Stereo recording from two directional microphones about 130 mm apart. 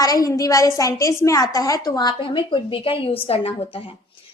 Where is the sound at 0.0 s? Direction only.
25° left (ahead or behind); by 3.5 s 50° left (ahead or behind).